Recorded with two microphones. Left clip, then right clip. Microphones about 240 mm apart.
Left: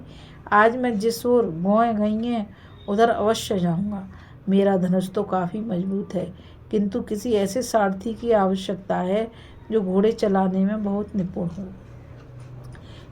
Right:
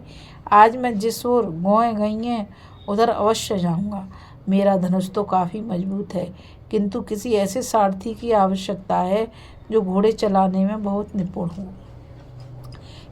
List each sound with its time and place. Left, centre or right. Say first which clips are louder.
0.4 s speech: right 4 dB; right